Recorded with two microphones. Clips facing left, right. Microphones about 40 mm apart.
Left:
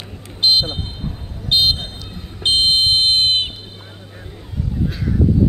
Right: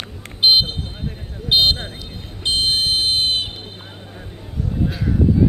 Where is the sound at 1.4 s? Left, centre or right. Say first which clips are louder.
Even; centre.